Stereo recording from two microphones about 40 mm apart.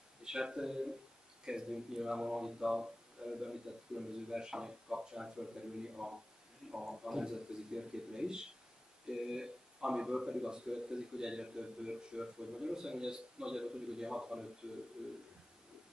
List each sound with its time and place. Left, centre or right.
0.2 s speech: centre